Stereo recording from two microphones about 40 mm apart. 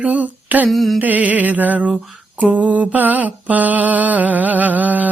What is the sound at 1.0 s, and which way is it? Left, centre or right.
Mantra, right.